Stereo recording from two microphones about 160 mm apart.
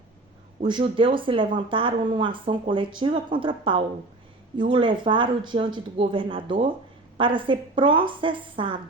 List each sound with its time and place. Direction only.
0.6 s speech: 30° right (ahead or behind)